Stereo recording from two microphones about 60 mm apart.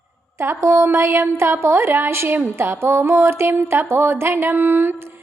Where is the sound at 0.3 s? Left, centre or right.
Right.